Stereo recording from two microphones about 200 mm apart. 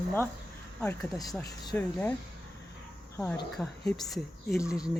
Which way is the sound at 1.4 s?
15° left (ahead or behind).